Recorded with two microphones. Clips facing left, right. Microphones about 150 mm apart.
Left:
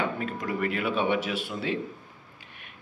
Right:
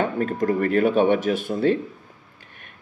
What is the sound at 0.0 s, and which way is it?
Speech, 45° right (ahead or behind).